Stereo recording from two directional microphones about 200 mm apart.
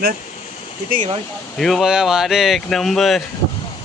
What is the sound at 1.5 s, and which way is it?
Speech, centre (ahead or behind).